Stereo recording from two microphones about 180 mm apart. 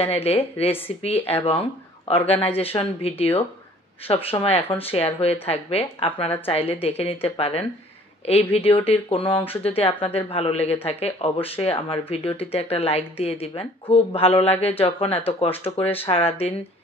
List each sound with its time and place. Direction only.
0.0 s speech: 35° left (ahead or behind)